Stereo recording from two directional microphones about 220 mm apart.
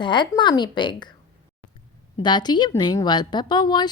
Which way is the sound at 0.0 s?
20° left (ahead or behind).